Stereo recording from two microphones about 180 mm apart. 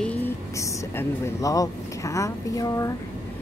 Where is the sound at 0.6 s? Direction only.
15° left (ahead or behind).